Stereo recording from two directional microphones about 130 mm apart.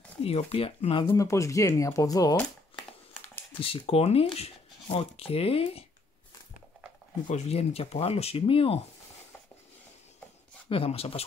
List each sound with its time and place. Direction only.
0.2 s speech: 50° left (ahead or behind)
1.0 s speech: 25° left (ahead or behind)
3.5 s speech: 45° left (ahead or behind)
7.2 s speech: 55° left (ahead or behind)
10.7 s speech: 45° left (ahead or behind)